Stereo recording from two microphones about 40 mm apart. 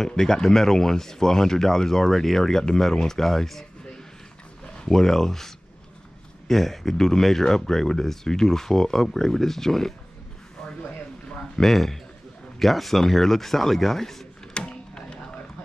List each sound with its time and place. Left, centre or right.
0.0 s speech: centre
4.8 s speech: centre
11.5 s speech: centre
14.5 s a sound: left